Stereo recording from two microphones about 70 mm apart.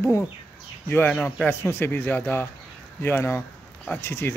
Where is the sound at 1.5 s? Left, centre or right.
Left.